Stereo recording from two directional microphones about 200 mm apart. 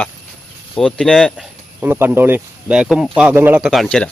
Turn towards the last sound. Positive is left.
turn(degrees=5)  # may be behind; listen again after turning